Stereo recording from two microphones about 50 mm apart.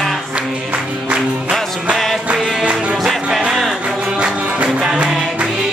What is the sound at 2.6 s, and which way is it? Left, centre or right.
Music, centre.